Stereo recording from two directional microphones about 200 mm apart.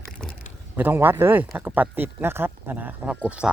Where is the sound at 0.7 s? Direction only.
10° right (ahead or behind).